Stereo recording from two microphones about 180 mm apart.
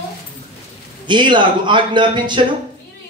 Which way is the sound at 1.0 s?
25° right (ahead or behind).